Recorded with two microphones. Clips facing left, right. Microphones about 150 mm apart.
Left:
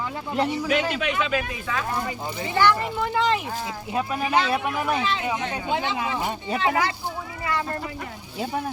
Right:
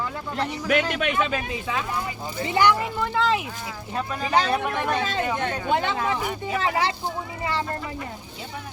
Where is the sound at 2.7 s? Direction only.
Centre (ahead or behind).